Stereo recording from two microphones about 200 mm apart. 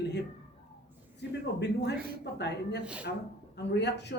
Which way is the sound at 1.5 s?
55° left (ahead or behind).